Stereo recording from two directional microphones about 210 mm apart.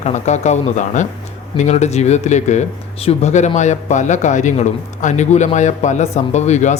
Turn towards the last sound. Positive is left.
turn(degrees=35)  # may be behind; listen again after turning